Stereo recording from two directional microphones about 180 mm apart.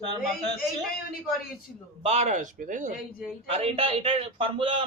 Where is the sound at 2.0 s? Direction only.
35° right (ahead or behind).